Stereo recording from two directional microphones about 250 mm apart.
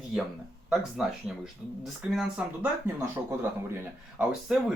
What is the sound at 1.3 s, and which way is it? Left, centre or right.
Speech, centre.